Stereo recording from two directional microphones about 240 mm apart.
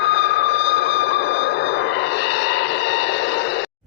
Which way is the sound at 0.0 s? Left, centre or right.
Left.